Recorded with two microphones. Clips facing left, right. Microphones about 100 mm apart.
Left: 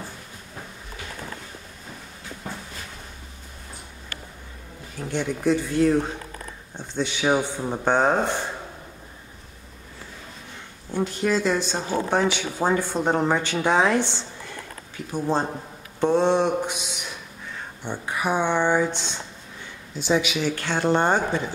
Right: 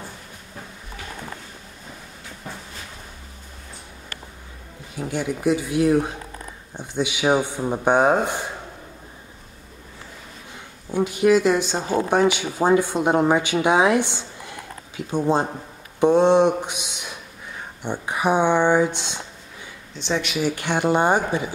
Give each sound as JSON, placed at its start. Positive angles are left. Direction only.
{"t": 4.9, "sound": "speech", "side_deg": -5}
{"t": 10.9, "sound": "speech", "side_deg": -10}
{"t": 17.8, "sound": "speech", "side_deg": -20}
{"t": 19.9, "sound": "speech", "side_deg": 5}
{"t": 20.4, "sound": "speech", "side_deg": -15}